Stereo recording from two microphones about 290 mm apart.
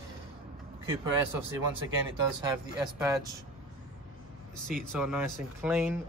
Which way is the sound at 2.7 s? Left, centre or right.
Centre.